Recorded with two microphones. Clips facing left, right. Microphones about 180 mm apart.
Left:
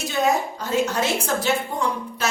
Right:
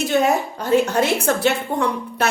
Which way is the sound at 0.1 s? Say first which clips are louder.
Right 1 dB; 60° right (ahead or behind).